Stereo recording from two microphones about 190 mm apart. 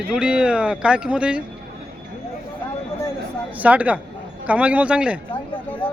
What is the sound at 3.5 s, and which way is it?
A man's voice, 10° right (ahead or behind).